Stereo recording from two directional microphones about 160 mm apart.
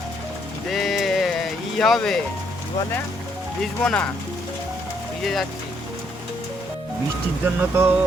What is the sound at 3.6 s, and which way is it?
Speech, 5° left (ahead or behind).